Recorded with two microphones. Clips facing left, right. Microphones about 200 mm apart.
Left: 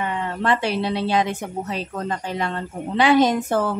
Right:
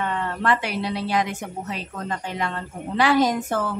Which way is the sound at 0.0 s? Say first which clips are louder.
Left 1 dB; 15° left (ahead or behind).